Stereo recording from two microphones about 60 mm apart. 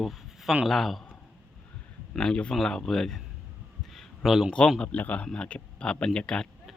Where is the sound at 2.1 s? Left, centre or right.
Centre.